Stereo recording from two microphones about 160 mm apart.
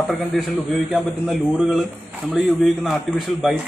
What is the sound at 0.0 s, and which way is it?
A man's voice, centre (ahead or behind).